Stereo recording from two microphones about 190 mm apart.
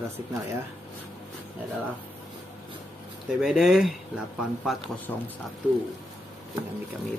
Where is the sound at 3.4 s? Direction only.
Centre (ahead or behind).